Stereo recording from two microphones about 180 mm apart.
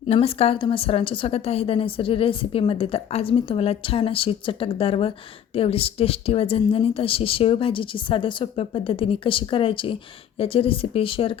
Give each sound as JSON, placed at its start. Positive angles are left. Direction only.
{"t": 0.1, "sound": "speech", "side_deg": 35}